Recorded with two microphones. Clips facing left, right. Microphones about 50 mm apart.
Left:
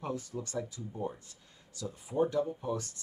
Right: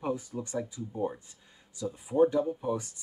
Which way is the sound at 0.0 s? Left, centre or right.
Centre.